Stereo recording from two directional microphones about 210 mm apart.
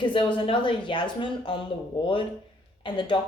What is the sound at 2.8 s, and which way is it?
Speech, 25° left (ahead or behind).